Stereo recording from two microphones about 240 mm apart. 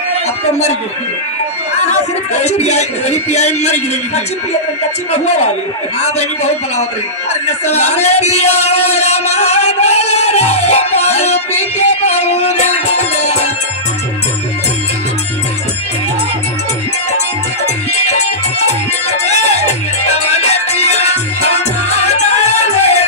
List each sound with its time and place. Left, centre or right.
1.8 s speech: left
7.4 s a sound: left
17.9 s music: left
19.2 s music: left
20.7 s music: left